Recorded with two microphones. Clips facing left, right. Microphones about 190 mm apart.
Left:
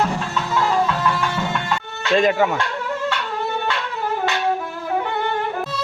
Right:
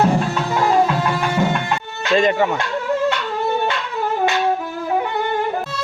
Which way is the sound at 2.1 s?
Centre (ahead or behind).